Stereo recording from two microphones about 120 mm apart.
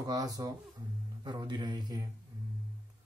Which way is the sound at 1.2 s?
40° right (ahead or behind).